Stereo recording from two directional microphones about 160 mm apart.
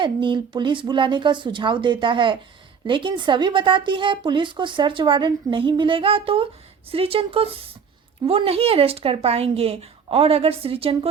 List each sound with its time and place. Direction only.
0.0 s speech: 30° right (ahead or behind)